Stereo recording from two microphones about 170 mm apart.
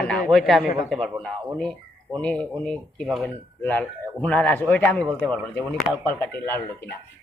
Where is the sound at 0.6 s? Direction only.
50° left (ahead or behind).